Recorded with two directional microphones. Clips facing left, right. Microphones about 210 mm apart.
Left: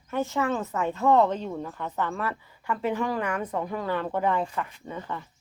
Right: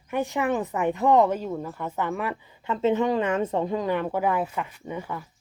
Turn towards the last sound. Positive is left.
turn(degrees=-10)  # may be behind; listen again after turning